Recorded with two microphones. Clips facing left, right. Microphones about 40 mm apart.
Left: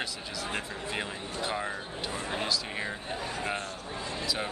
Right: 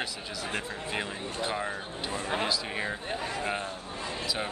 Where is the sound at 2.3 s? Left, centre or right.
Right.